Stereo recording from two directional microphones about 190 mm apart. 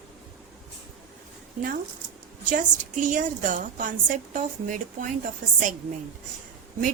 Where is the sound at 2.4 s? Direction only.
40° right (ahead or behind).